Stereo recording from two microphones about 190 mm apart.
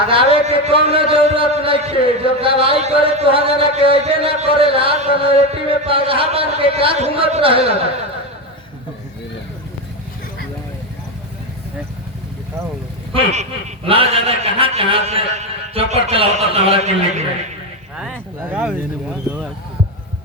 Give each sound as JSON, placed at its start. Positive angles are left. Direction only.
{"t": 0.1, "sound": "speech", "side_deg": -30}
{"t": 13.1, "sound": "a man's voice", "side_deg": -30}
{"t": 17.9, "sound": "speech", "side_deg": -5}